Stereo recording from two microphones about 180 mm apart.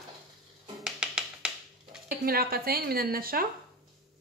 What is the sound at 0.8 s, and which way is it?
Music, 5° right (ahead or behind).